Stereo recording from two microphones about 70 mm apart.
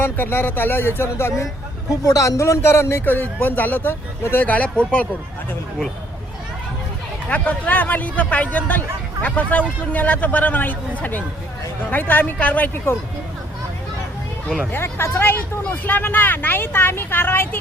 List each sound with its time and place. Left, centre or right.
0.0 s speech: left
2.0 s speech: left; by 5.0 s centre
7.3 s speech: left
14.7 s speech: left